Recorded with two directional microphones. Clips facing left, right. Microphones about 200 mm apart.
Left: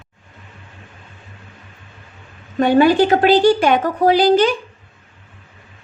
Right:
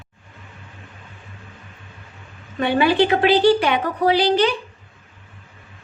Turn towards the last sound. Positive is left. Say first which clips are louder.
# left 4 dB
turn(degrees=45)  # may be behind; listen again after turning